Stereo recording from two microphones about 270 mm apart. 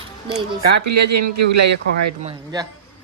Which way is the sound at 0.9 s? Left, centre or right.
Right.